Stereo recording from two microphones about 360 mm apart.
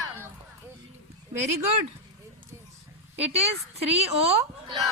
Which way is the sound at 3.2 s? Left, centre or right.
Centre.